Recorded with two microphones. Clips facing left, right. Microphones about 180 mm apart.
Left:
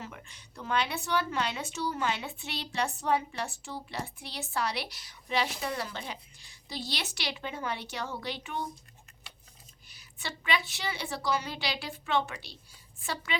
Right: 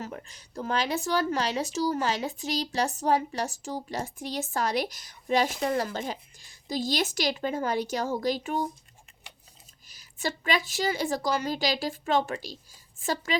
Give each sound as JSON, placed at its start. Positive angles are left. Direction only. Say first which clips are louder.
{"t": 0.0, "sound": "a woman's voice", "louder": "right 6 dB", "side_deg": -40}
{"t": 9.9, "sound": "speech", "louder": "right 9 dB", "side_deg": -40}